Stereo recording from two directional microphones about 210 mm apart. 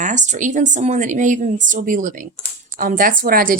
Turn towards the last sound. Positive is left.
turn(degrees=-45)  # may be behind; listen again after turning